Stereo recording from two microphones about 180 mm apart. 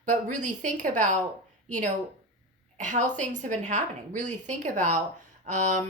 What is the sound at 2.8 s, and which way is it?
A woman's voice, 45° right (ahead or behind).